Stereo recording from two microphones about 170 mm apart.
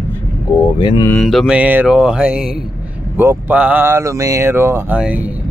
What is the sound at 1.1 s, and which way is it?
Speech, centre (ahead or behind).